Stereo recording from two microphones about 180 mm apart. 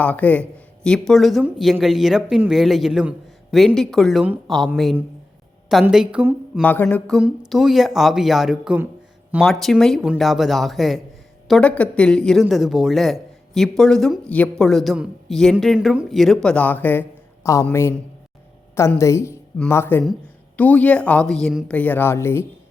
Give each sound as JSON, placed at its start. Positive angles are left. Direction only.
{"t": 0.0, "sound": "speech", "side_deg": 10}
{"t": 6.6, "sound": "speech", "side_deg": 10}
{"t": 7.2, "sound": "speech", "side_deg": 0}